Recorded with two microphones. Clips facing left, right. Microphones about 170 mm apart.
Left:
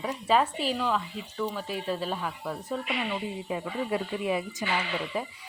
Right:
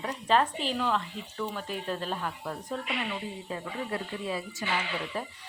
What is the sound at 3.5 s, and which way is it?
A woman's voice, 15° left (ahead or behind).